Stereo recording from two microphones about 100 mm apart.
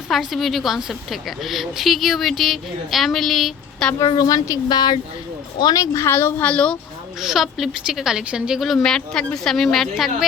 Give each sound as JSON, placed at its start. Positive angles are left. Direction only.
{"t": 0.1, "sound": "a woman's voice", "side_deg": 0}
{"t": 4.1, "sound": "a woman's voice", "side_deg": 45}
{"t": 6.5, "sound": "speech", "side_deg": 10}
{"t": 7.2, "sound": "a woman's voice", "side_deg": 0}